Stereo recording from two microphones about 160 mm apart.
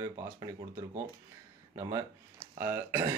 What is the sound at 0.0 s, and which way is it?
Speech, 20° right (ahead or behind).